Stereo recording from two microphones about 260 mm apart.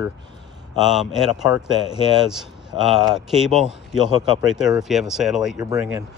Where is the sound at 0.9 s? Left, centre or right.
Centre.